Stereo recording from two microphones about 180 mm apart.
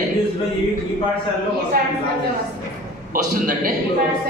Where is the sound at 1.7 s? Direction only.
55° right (ahead or behind).